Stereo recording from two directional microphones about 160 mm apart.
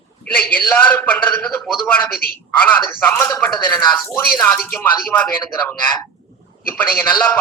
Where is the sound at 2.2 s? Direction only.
65° left (ahead or behind).